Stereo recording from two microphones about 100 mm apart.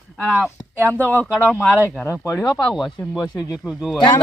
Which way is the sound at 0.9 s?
20° left (ahead or behind).